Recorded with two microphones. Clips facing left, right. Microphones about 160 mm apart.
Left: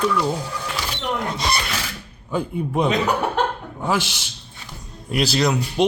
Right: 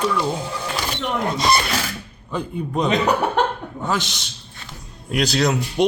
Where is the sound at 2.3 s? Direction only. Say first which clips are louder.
Left 2 dB; 10° left (ahead or behind).